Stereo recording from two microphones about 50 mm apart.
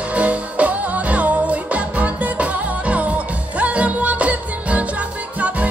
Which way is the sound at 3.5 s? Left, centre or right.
Right.